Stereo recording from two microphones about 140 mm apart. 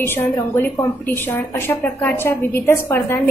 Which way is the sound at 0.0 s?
15° left (ahead or behind).